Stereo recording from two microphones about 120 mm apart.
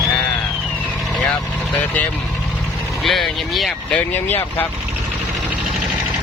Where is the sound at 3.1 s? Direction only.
Centre (ahead or behind).